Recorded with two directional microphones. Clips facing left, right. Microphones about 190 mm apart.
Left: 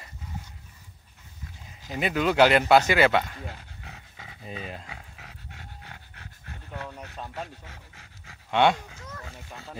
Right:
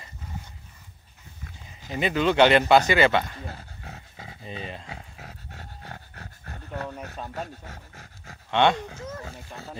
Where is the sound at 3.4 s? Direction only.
40° right (ahead or behind).